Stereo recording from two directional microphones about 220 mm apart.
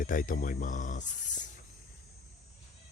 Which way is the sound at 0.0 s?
40° left (ahead or behind).